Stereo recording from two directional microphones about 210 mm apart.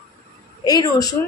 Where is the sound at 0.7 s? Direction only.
15° left (ahead or behind).